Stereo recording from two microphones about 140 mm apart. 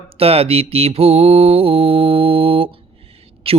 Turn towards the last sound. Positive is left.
turn(degrees=-45)  # may be behind; listen again after turning